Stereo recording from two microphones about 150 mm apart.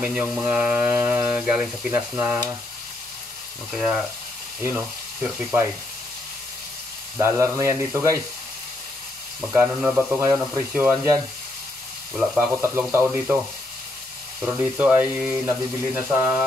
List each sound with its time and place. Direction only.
0.0 s speech: 10° right (ahead or behind)
3.7 s speech: 5° right (ahead or behind)
7.2 s speech: 20° right (ahead or behind)
9.5 s speech: 5° right (ahead or behind)
12.6 s speech: 15° right (ahead or behind)
14.4 s speech: 10° right (ahead or behind)